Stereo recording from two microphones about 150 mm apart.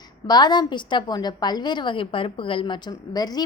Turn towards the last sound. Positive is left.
turn(degrees=25)  # may be behind; listen again after turning